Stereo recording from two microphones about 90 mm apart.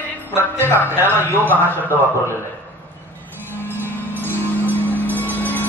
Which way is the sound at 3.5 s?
20° left (ahead or behind).